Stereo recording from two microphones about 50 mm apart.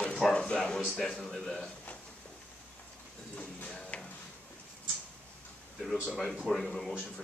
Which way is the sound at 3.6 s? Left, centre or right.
Left.